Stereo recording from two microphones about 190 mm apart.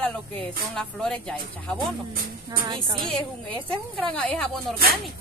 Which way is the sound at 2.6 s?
25° right (ahead or behind).